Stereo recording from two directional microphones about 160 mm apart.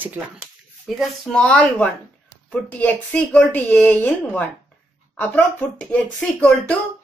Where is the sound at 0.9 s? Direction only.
5° left (ahead or behind).